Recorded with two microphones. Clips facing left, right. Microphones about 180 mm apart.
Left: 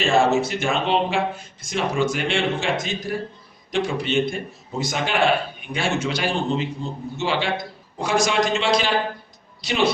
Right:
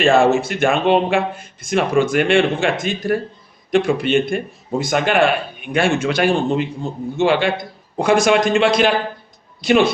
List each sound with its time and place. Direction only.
0.0 s a man's voice: 55° right (ahead or behind)